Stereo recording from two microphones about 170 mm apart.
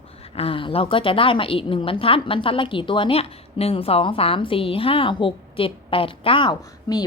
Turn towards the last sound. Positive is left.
turn(degrees=25)  # may be behind; listen again after turning